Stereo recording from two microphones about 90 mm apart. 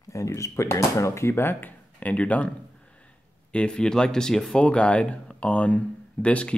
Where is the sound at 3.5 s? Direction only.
10° left (ahead or behind).